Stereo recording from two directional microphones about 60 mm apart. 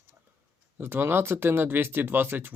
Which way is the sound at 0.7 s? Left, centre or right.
Right.